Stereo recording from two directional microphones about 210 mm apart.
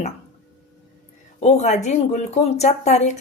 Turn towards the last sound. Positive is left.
turn(degrees=30)  # may be behind; listen again after turning